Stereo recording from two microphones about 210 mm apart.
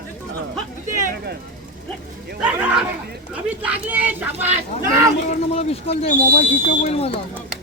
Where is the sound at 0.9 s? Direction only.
45° right (ahead or behind).